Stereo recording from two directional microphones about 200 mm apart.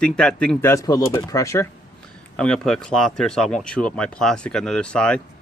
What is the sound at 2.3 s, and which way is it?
Speech, 5° left (ahead or behind).